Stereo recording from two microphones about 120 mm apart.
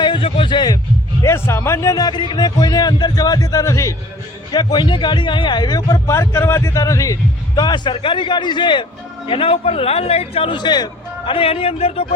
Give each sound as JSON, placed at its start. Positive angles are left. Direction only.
{"t": 0.0, "sound": "a sound", "side_deg": 45}
{"t": 1.2, "sound": "a man's voice", "side_deg": 25}
{"t": 4.5, "sound": "a man's voice", "side_deg": 40}
{"t": 11.3, "sound": "speech", "side_deg": 50}